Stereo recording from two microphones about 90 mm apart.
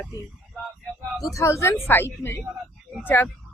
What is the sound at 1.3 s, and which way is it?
A woman's voice, 35° left (ahead or behind).